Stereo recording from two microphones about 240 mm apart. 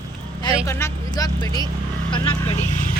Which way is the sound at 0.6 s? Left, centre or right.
Centre.